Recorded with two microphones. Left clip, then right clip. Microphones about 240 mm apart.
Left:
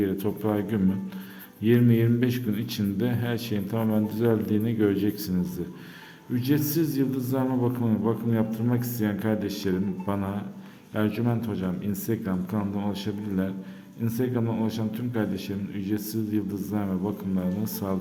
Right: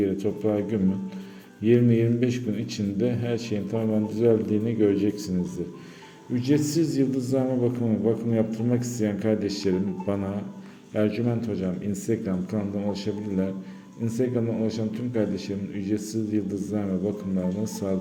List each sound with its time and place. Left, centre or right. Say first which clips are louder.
0.0 s a man's voice: right 2 dB; centre
6.3 s a man's voice: right 2 dB; centre